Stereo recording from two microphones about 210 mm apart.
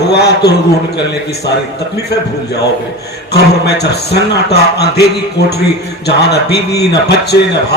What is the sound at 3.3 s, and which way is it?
A man's voice, 50° left (ahead or behind).